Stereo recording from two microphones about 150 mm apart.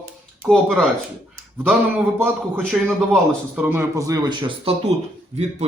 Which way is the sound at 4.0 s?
20° right (ahead or behind).